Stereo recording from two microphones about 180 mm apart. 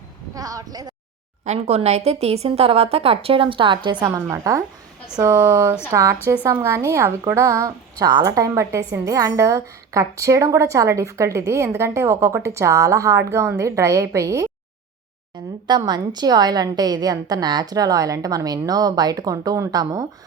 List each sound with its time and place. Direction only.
0.3 s a woman's voice: 20° right (ahead or behind)
1.5 s a woman's voice: 35° right (ahead or behind); by 14.5 s 15° right (ahead or behind)
15.6 s a woman's voice: 25° right (ahead or behind)